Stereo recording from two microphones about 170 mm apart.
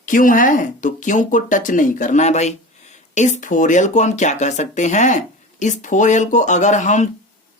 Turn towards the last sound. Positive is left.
turn(degrees=45)  # may be behind; listen again after turning